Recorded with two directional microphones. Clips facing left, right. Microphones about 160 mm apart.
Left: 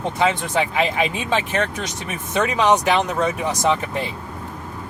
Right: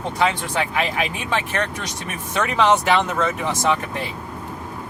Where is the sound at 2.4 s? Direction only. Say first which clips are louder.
Left 1 dB; 15° left (ahead or behind).